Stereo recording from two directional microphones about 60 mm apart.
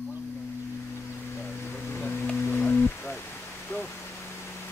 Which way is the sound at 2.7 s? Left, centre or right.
Left.